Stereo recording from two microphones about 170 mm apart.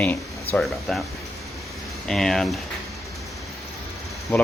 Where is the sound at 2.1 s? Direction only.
Centre (ahead or behind).